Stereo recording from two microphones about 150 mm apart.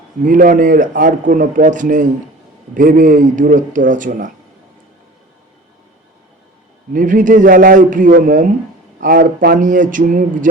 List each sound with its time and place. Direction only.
0.2 s speech: 60° right (ahead or behind)
6.9 s speech: 60° right (ahead or behind)